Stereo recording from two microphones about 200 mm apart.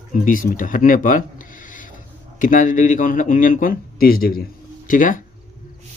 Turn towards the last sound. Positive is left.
turn(degrees=40)  # may be behind; listen again after turning